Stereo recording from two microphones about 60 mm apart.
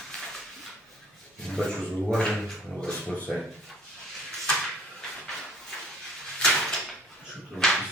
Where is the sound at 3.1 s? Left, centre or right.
Left.